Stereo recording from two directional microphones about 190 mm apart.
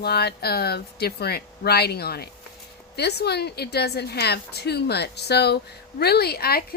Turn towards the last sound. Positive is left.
turn(degrees=55)  # may be behind; listen again after turning